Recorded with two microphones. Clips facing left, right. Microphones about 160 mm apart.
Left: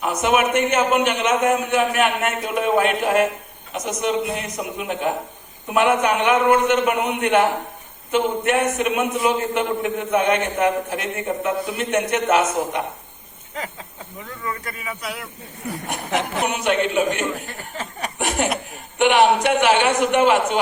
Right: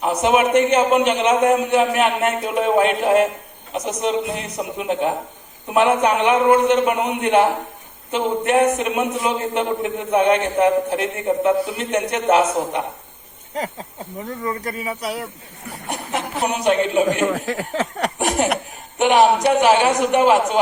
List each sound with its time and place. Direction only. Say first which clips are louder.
0.0 s a man's voice: right 2 dB; 30° right (ahead or behind)
16.5 s a man's voice: right 5 dB; 35° right (ahead or behind)
17.2 s speech: right 6 dB; 90° right
18.2 s a man's voice: right 2 dB; 40° right (ahead or behind)